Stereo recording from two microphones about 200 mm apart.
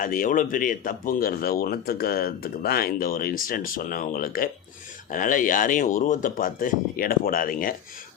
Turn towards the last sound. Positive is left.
turn(degrees=45)  # may be behind; listen again after turning